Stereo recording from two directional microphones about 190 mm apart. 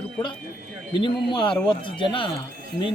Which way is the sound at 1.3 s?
25° left (ahead or behind).